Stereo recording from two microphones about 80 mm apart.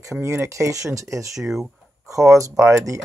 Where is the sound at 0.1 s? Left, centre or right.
Right.